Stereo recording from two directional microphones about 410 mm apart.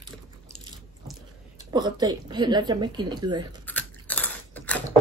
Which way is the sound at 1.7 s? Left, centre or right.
Centre.